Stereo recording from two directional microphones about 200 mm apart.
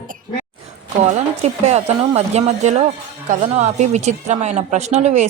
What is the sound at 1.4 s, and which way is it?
Speech, 35° right (ahead or behind).